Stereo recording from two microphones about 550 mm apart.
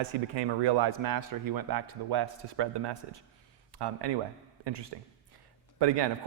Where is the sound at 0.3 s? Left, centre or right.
Right.